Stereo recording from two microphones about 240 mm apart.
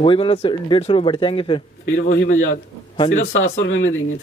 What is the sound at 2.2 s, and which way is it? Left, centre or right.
A man's voice, left.